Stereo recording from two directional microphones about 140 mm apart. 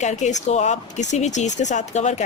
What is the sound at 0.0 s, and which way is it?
Speech, 55° left (ahead or behind).